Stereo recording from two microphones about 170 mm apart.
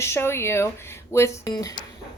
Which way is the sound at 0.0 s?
15° left (ahead or behind).